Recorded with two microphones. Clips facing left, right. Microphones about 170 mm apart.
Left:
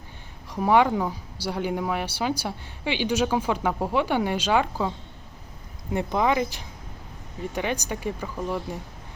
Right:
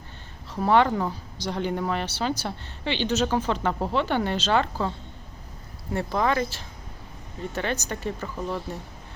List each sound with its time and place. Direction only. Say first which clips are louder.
0.5 s speech: left 1 dB; 10° left (ahead or behind)